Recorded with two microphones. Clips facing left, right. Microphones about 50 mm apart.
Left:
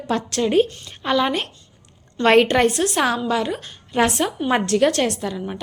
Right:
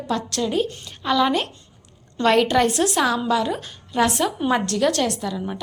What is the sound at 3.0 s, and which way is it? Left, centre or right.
A woman's voice, left.